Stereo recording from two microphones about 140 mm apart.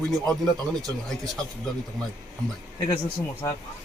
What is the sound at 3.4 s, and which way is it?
Speech, 25° left (ahead or behind).